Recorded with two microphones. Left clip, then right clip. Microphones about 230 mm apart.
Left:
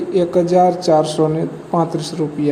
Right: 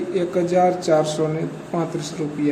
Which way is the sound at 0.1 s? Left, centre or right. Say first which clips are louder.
Left 6 dB; centre.